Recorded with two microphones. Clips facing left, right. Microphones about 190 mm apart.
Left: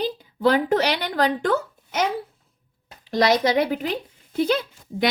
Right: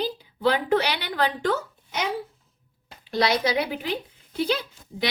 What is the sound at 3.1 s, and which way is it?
A woman's voice, 45° left (ahead or behind).